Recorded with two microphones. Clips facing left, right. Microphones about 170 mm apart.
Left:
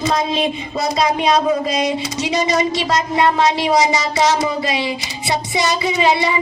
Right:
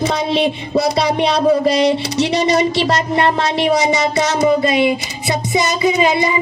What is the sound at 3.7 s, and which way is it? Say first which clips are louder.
Child singing: right 1 dB; 60° right (ahead or behind).